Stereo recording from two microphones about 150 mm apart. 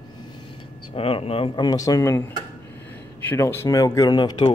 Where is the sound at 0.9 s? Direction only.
40° left (ahead or behind); by 2.2 s 20° left (ahead or behind).